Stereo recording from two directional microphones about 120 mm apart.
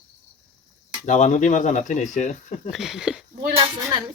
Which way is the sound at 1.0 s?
90° left.